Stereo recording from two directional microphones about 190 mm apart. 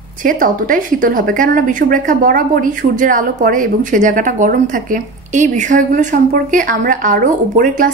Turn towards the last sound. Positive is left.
turn(degrees=-45)  # may be behind; listen again after turning